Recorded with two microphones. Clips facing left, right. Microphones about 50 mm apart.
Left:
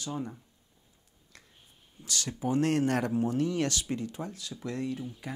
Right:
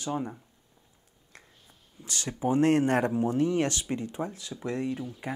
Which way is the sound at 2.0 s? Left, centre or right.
Centre.